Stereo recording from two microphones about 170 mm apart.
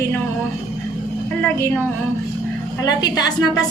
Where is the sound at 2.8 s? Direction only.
25° left (ahead or behind).